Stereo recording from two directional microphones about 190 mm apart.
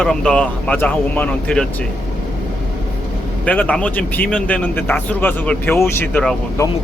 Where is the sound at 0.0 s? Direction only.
5° left (ahead or behind).